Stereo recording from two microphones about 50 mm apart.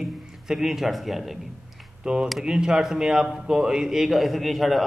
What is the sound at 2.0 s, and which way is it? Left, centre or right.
A man's voice, centre.